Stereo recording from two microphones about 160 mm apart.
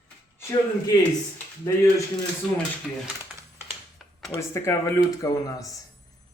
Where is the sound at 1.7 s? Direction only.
20° left (ahead or behind).